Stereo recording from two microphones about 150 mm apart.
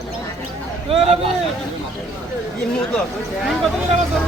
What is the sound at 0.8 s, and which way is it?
Speech, 40° right (ahead or behind).